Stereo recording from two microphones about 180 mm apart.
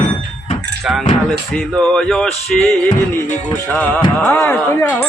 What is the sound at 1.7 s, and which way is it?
Speech, 5° left (ahead or behind).